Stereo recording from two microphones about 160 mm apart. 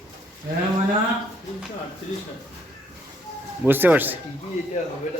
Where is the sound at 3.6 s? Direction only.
10° right (ahead or behind).